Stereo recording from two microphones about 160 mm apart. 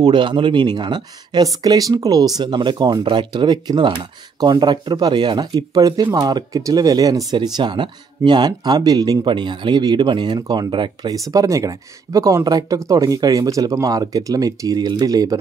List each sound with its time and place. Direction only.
0.0 s speech: 30° right (ahead or behind)